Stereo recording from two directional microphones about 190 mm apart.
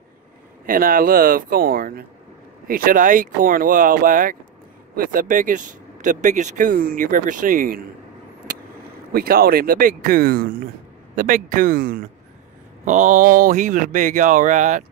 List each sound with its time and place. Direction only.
0.7 s speech: 45° right (ahead or behind)
9.1 s speech: 50° right (ahead or behind)